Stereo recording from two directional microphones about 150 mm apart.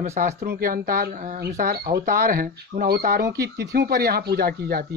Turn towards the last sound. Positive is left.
turn(degrees=-90)